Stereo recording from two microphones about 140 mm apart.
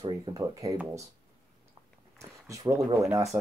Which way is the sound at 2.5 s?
25° right (ahead or behind).